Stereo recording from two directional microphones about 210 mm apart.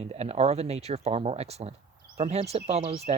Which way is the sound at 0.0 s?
30° right (ahead or behind).